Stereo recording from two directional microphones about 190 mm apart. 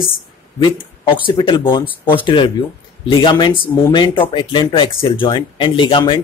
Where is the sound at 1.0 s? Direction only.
25° left (ahead or behind).